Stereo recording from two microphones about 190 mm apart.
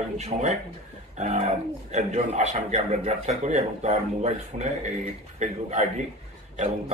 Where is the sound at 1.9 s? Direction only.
35° right (ahead or behind).